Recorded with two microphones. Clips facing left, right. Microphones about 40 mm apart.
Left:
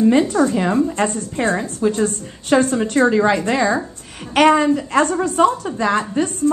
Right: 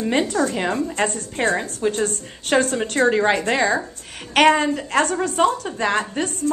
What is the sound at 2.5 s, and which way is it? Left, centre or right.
Speech, centre.